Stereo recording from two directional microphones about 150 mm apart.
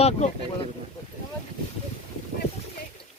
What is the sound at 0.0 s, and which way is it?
Speech, 45° left (ahead or behind).